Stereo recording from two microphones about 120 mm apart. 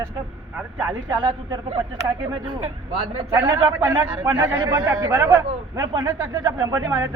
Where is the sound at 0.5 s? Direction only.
15° right (ahead or behind).